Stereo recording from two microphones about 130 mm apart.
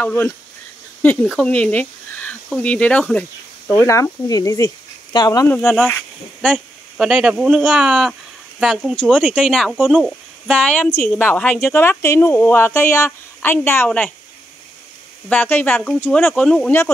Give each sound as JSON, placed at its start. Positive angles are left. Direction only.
{"t": 0.0, "sound": "speech", "side_deg": 15}
{"t": 1.4, "sound": "speech", "side_deg": 10}
{"t": 3.8, "sound": "speech", "side_deg": 25}
{"t": 5.6, "sound": "speech", "side_deg": 0}
{"t": 7.0, "sound": "speech", "side_deg": -5}
{"t": 8.9, "sound": "speech", "side_deg": 5}
{"t": 9.8, "sound": "speech", "side_deg": -10}
{"t": 10.4, "sound": "speech", "side_deg": 10}
{"t": 15.2, "sound": "speech", "side_deg": 15}
{"t": 16.1, "sound": "speech", "side_deg": 5}